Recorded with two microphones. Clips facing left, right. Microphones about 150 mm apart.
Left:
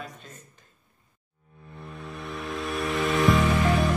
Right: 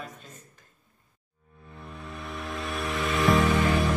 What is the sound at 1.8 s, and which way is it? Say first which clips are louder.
Music: left 2 dB; centre (ahead or behind).